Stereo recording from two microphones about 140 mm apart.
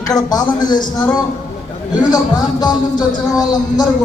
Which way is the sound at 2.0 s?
30° left (ahead or behind).